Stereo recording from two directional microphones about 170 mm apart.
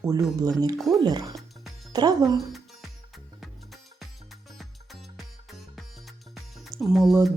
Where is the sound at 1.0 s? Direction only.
25° right (ahead or behind).